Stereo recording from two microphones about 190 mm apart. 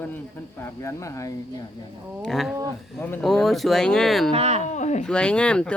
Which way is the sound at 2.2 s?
Centre (ahead or behind).